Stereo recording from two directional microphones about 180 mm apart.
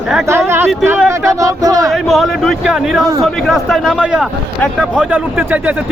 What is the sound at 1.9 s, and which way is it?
Speech, centre (ahead or behind).